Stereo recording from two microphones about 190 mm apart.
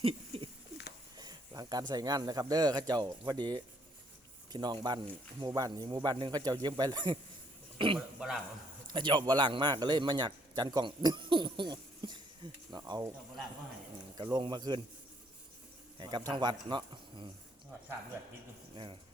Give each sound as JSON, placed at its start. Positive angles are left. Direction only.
{"t": 0.0, "sound": "rodents", "side_deg": -30}
{"t": 1.2, "sound": "a sound", "side_deg": -20}
{"t": 1.9, "sound": "speech", "side_deg": -20}
{"t": 7.9, "sound": "a man's voice", "side_deg": 0}
{"t": 8.9, "sound": "speech", "side_deg": -25}
{"t": 14.3, "sound": "speech", "side_deg": -25}
{"t": 16.0, "sound": "speech", "side_deg": -20}